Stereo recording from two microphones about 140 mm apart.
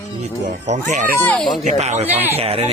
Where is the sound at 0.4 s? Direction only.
60° right (ahead or behind).